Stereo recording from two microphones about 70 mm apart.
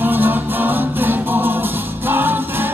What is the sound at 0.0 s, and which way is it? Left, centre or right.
Music, right.